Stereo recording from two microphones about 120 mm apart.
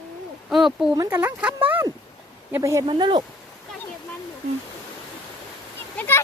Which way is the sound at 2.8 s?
40° right (ahead or behind).